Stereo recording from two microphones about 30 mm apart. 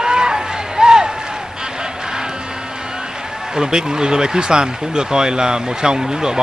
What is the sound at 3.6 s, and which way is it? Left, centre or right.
Speech, right.